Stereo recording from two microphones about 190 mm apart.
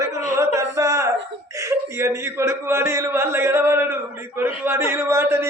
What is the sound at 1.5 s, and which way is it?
Speech, 15° right (ahead or behind).